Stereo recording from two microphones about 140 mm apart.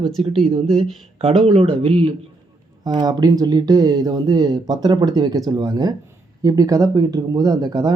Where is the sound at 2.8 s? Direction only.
30° right (ahead or behind).